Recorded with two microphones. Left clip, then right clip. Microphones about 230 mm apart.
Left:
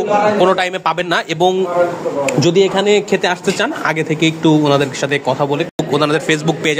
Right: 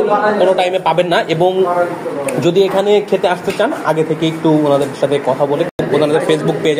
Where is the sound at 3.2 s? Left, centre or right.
Left.